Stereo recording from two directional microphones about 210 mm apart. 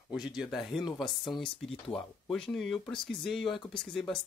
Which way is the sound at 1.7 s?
25° left (ahead or behind).